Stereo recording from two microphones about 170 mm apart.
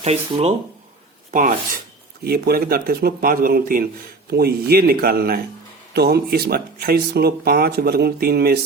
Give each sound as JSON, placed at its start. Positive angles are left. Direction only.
{"t": 0.0, "sound": "speech", "side_deg": -35}
{"t": 1.3, "sound": "rub", "side_deg": -50}
{"t": 2.2, "sound": "speech", "side_deg": -65}